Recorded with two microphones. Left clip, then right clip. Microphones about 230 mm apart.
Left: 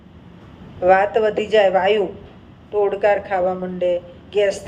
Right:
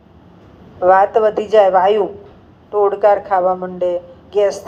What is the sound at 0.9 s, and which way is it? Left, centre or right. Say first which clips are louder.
A woman's voice: right 4 dB; right.